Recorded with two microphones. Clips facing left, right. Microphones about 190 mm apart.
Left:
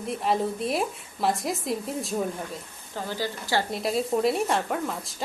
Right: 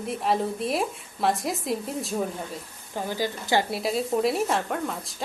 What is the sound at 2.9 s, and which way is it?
A woman's voice, 15° right (ahead or behind).